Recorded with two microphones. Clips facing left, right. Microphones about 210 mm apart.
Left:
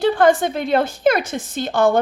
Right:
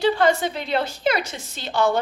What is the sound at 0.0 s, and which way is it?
A woman's voice, 50° left (ahead or behind).